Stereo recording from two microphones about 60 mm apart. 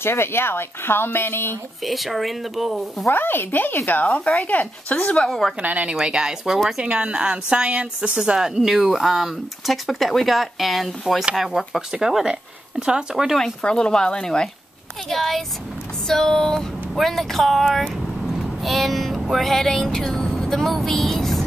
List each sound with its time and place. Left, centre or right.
0.0 s speech: left
1.8 s speech: centre
3.1 s speech: left
5.6 s speech: right
6.0 s a woman's voice: centre
13.4 s speech: centre
18.4 s a sound: centre